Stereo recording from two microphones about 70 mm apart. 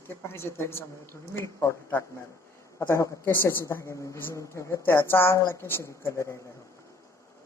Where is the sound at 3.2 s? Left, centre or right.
Left.